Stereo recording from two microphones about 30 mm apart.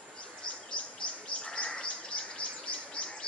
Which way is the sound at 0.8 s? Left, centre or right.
Left.